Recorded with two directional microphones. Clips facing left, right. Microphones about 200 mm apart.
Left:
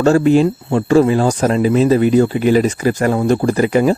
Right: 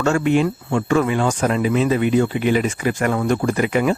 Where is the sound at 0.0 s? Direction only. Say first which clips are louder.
Left 6 dB; 35° left (ahead or behind).